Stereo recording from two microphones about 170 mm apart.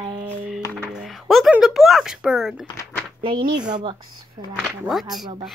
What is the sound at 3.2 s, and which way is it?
Speech, 30° right (ahead or behind).